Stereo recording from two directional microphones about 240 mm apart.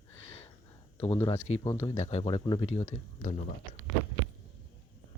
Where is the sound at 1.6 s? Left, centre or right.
Centre.